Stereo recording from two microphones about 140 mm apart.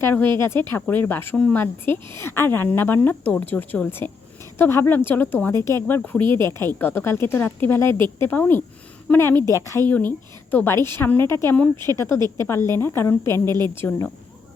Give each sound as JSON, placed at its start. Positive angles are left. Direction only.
{"t": 0.0, "sound": "a woman's voice", "side_deg": 15}
{"t": 13.5, "sound": "a woman's voice", "side_deg": -30}